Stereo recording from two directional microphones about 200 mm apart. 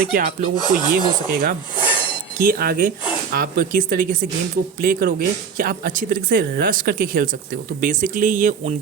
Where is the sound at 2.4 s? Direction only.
45° right (ahead or behind).